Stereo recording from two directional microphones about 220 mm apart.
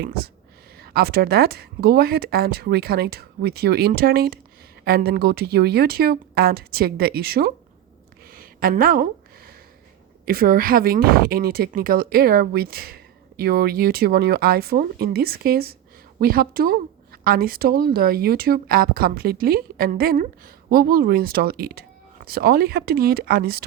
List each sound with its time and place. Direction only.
0.0 s speech: 45° right (ahead or behind)
8.3 s a sound: 40° right (ahead or behind)
10.2 s speech: 40° right (ahead or behind)